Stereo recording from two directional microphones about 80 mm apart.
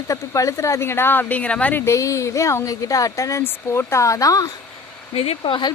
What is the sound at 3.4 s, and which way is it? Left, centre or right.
A woman's voice, left.